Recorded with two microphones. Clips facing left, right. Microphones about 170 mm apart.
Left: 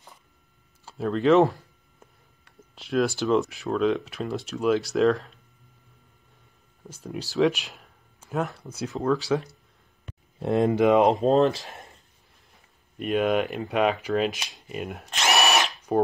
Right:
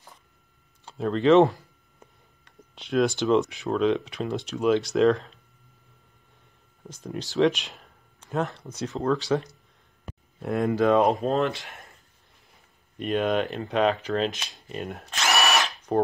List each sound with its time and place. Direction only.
0.8 s speech: centre (ahead or behind)
6.9 s speech: centre (ahead or behind)
10.4 s speech: 25° left (ahead or behind)
13.0 s speech: 5° left (ahead or behind)
15.1 s drill: 20° left (ahead or behind)